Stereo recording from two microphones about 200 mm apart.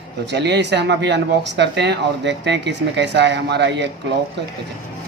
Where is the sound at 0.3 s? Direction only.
60° right (ahead or behind).